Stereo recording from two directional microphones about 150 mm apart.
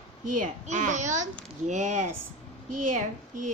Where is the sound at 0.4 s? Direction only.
55° right (ahead or behind).